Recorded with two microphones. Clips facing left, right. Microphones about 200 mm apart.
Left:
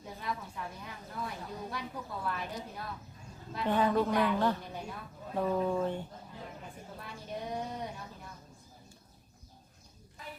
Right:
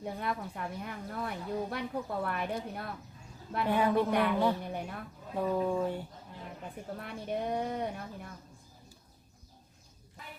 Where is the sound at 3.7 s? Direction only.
10° right (ahead or behind).